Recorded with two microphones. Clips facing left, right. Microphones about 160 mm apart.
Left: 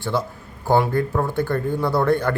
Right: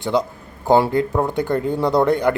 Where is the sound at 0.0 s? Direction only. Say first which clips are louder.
Right 4 dB; 15° right (ahead or behind).